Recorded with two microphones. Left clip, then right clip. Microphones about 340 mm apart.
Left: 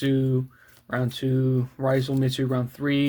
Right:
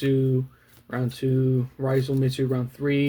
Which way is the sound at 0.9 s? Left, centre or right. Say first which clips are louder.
Even; left.